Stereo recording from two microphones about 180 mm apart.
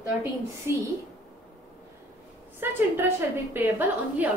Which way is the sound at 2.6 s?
10° right (ahead or behind).